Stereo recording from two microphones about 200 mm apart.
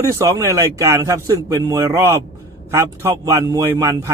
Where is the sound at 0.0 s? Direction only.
15° right (ahead or behind).